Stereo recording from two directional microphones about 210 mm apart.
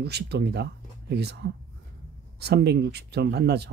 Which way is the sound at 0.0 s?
50° right (ahead or behind).